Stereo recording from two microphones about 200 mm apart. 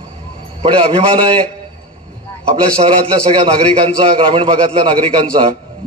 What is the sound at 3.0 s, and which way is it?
A man's voice, 25° right (ahead or behind).